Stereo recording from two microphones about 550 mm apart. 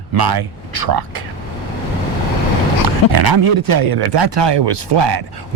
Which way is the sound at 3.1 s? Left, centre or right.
Right.